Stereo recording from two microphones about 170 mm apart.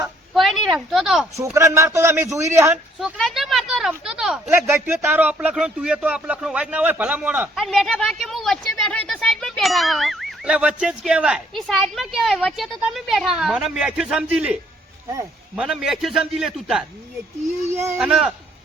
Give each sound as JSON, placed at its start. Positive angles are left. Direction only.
{"t": 0.3, "sound": "a sound", "side_deg": 0}
{"t": 0.9, "sound": "speech", "side_deg": 0}
{"t": 1.5, "sound": "speech", "side_deg": -15}
{"t": 3.0, "sound": "speech", "side_deg": 0}
{"t": 15.1, "sound": "speech", "side_deg": -20}
{"t": 15.6, "sound": "speech", "side_deg": 0}
{"t": 17.7, "sound": "speech", "side_deg": -15}
{"t": 18.0, "sound": "speech", "side_deg": -5}